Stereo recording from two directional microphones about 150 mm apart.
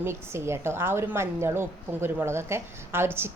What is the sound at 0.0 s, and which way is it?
Speech, 15° right (ahead or behind).